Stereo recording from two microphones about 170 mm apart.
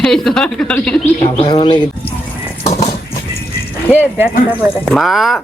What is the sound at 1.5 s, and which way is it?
Speech, 25° left (ahead or behind).